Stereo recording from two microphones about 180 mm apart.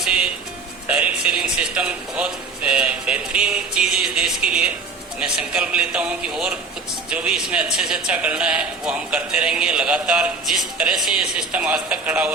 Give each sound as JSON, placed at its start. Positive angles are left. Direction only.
{"t": 0.9, "sound": "a man's voice", "side_deg": -5}